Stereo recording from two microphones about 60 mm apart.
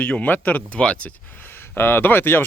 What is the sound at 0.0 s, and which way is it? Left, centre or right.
Speech, left.